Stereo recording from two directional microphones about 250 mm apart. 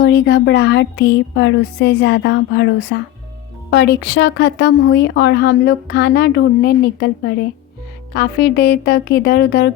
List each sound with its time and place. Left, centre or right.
0.0 s a woman's voice: left